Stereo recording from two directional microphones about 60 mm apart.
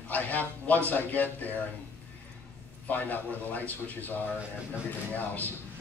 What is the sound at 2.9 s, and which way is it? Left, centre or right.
A man's voice, left.